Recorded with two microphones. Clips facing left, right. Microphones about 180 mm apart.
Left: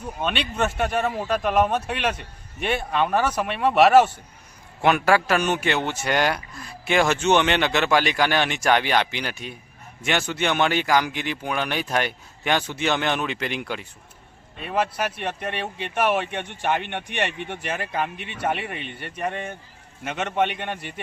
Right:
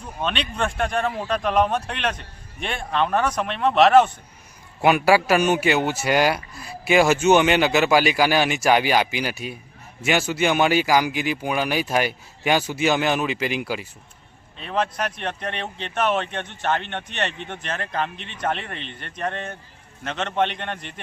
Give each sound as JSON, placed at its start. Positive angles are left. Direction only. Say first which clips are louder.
{"t": 0.0, "sound": "speech", "louder": "even", "side_deg": 5}
{"t": 4.8, "sound": "a man's voice", "louder": "right 2 dB", "side_deg": -10}
{"t": 14.6, "sound": "speech", "louder": "even", "side_deg": 10}